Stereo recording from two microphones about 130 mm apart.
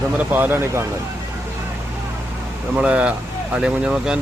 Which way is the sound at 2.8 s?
10° right (ahead or behind).